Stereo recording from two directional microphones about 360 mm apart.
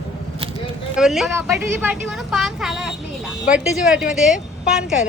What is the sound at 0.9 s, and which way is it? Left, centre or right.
A woman's voice, centre.